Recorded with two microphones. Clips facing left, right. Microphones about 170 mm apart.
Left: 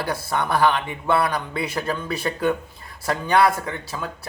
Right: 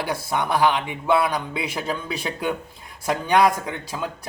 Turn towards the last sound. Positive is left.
turn(degrees=-15)  # may be behind; listen again after turning